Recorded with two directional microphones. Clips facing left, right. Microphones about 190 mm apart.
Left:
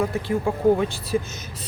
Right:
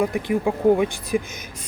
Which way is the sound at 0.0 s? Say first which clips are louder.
Right 2 dB; 15° right (ahead or behind).